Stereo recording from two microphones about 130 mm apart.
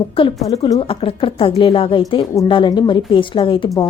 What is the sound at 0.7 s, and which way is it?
A woman's voice, 45° left (ahead or behind).